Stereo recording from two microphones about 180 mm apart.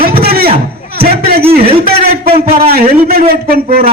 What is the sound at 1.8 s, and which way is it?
A man's voice, 60° right (ahead or behind).